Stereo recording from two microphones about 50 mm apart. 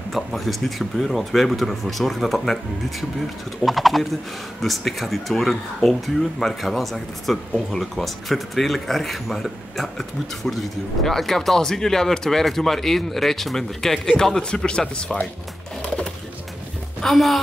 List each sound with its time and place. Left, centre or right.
0.1 s speech: centre
17.0 s speech: centre